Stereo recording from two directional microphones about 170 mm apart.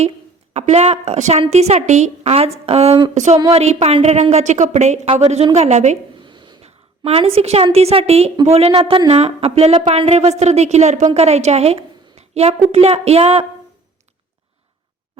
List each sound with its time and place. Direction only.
0.5 s a woman's voice: 40° right (ahead or behind)
6.2 s a woman's voice: 25° right (ahead or behind)